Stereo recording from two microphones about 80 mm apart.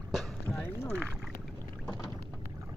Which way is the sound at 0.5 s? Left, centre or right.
Left.